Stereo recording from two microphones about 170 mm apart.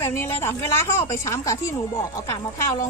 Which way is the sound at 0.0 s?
15° left (ahead or behind).